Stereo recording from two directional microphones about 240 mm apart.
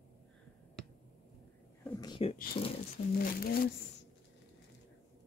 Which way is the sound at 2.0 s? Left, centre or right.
Centre.